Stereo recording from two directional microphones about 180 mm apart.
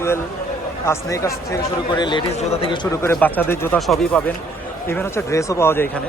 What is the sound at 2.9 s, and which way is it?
Speech, 10° left (ahead or behind).